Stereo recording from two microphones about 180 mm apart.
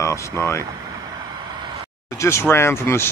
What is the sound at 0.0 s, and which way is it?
Speech, 15° left (ahead or behind).